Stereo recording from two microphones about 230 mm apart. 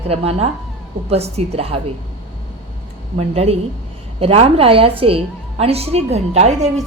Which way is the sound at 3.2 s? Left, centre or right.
Right.